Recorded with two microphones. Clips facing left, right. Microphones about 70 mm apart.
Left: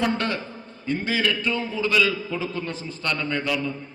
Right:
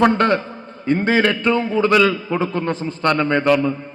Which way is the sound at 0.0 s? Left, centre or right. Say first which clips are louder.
Right 10 dB; right.